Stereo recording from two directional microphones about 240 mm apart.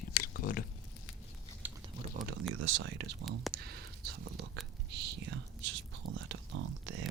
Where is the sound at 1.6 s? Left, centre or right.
Centre.